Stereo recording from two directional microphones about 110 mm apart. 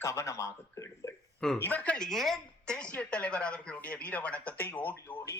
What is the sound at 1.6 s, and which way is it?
Speech, 15° left (ahead or behind).